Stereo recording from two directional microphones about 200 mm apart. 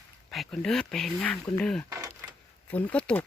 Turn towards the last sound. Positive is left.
turn(degrees=5)  # may be behind; listen again after turning